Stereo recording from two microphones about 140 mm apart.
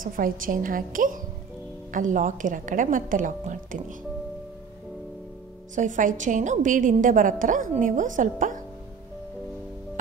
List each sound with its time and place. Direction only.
0.0 s a woman's voice: 85° right; by 3.8 s 70° right (ahead or behind)
5.8 s a woman's voice: 65° right (ahead or behind)